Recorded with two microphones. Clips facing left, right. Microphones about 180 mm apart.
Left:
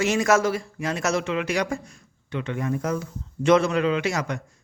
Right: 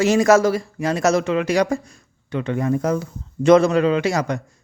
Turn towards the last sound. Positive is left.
turn(degrees=-35)  # may be behind; listen again after turning